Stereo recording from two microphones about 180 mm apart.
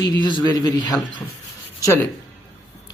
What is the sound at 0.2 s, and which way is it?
Speech, 25° left (ahead or behind).